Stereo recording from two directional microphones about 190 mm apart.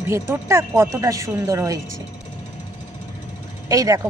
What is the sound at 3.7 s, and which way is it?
Speech, 15° right (ahead or behind).